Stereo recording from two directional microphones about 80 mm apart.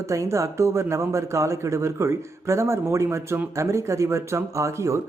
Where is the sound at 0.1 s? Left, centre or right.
Right.